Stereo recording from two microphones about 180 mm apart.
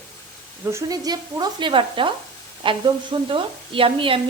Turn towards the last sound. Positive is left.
turn(degrees=-30)  # may be behind; listen again after turning